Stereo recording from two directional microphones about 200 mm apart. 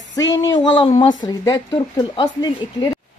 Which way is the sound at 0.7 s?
25° left (ahead or behind).